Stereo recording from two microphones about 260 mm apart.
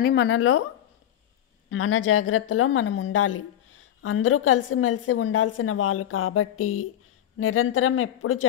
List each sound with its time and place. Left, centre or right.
0.0 s a woman's voice: left
1.7 s a woman's voice: left